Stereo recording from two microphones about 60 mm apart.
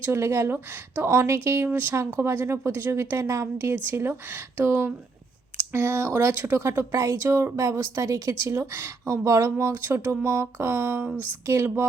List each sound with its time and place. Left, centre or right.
0.0 s a woman's voice: right
3.4 s a woman's voice: right
5.7 s a woman's voice: right
6.6 s a woman's voice: right
8.5 s a woman's voice: right